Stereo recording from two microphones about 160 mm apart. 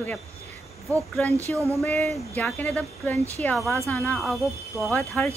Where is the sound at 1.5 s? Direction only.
20° right (ahead or behind).